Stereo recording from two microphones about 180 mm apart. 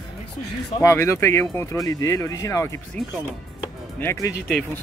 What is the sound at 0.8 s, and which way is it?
Speech, 15° left (ahead or behind).